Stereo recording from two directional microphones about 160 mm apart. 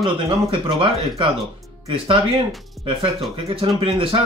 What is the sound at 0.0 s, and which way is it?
Speech, 35° right (ahead or behind).